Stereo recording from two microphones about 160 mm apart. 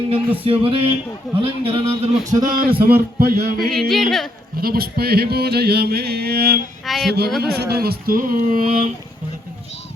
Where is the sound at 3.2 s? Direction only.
65° right (ahead or behind).